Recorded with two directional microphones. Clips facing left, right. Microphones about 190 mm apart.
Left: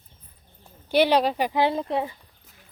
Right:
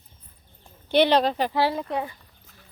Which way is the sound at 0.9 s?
10° left (ahead or behind).